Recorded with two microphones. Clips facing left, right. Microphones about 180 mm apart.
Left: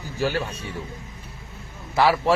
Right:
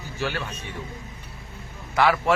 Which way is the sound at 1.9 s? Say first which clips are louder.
Left 1 dB; 30° left (ahead or behind).